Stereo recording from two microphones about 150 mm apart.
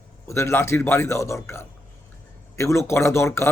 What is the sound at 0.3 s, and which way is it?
Speech, 20° left (ahead or behind).